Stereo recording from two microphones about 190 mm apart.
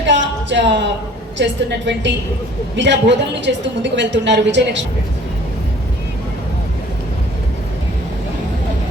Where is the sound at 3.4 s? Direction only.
70° right (ahead or behind).